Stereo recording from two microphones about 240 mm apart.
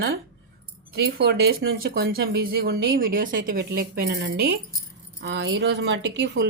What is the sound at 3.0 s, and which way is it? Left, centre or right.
Speech, right.